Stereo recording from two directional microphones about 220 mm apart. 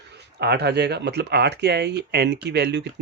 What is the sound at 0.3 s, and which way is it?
Speech, 50° right (ahead or behind).